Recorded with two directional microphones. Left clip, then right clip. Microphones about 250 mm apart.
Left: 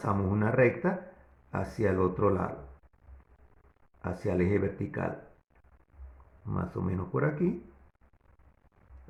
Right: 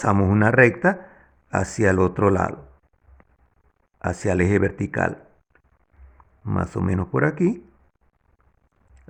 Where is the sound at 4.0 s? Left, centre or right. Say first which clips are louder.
Right 9 dB; right.